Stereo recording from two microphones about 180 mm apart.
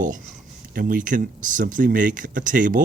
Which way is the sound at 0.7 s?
50° right (ahead or behind).